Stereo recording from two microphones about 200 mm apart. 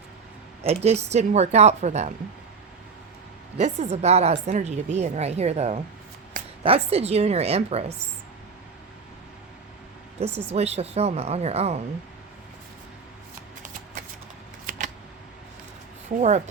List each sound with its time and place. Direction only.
0.7 s a woman's voice: 30° right (ahead or behind)
3.6 s a woman's voice: 35° right (ahead or behind)
10.5 s a woman's voice: 30° right (ahead or behind)
14.7 s a sound: 45° right (ahead or behind)
16.0 s a woman's voice: 35° right (ahead or behind)